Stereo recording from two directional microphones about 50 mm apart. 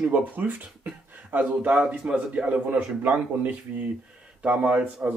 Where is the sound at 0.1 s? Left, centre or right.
Right.